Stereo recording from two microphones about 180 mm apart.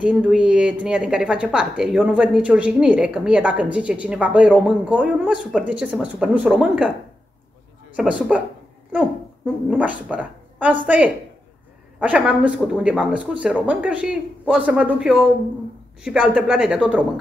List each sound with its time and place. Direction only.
0.0 s a woman's voice: 5° right (ahead or behind)
7.9 s a woman's voice: 5° right (ahead or behind)
9.7 s speech: 5° right (ahead or behind)
12.0 s a woman's voice: 5° right (ahead or behind)